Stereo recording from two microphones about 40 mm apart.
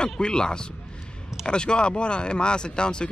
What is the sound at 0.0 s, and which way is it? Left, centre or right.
Speech, left.